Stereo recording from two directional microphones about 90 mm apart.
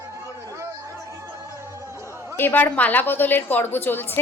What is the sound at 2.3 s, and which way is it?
A woman's voice, 20° left (ahead or behind).